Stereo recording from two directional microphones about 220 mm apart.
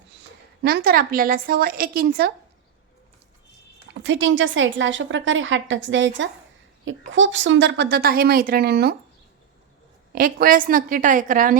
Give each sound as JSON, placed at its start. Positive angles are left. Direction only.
{"t": 0.6, "sound": "a woman's voice", "side_deg": -45}
{"t": 4.0, "sound": "a woman's voice", "side_deg": -60}
{"t": 10.1, "sound": "a woman's voice", "side_deg": -40}